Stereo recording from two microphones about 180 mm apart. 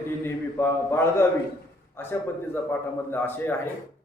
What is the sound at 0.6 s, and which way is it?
A man's voice, 15° left (ahead or behind).